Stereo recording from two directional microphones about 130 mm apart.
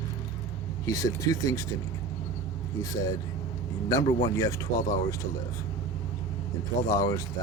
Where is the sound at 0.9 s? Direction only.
25° left (ahead or behind).